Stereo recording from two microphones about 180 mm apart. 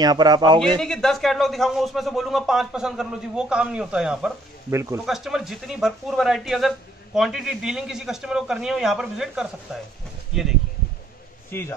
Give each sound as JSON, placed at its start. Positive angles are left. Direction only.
{"t": 0.0, "sound": "speech", "side_deg": -20}
{"t": 0.7, "sound": "a man's voice", "side_deg": 0}
{"t": 4.6, "sound": "speech", "side_deg": -15}
{"t": 5.0, "sound": "a man's voice", "side_deg": 0}
{"t": 11.5, "sound": "a man's voice", "side_deg": 15}